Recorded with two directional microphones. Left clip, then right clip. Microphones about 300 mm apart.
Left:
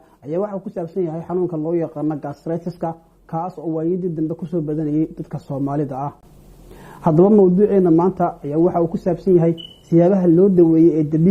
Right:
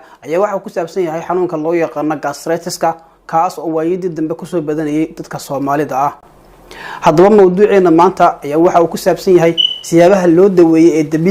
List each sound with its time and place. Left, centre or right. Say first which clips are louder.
0.3 s speech: right 9 dB; centre